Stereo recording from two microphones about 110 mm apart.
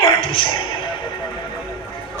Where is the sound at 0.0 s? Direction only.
55° left (ahead or behind).